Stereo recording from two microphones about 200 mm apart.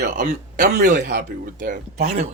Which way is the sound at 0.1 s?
40° right (ahead or behind).